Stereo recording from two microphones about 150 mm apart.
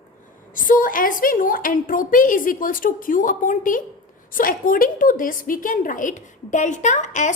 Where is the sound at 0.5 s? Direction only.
65° left (ahead or behind).